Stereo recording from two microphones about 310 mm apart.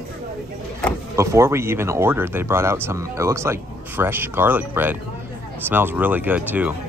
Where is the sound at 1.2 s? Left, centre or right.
Centre.